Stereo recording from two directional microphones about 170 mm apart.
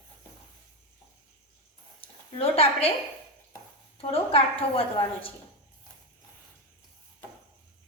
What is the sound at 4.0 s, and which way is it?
A woman's voice, 35° left (ahead or behind).